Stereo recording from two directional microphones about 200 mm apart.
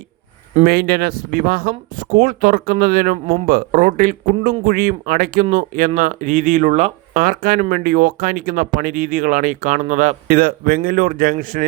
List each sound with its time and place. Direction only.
0.6 s speech: 50° right (ahead or behind)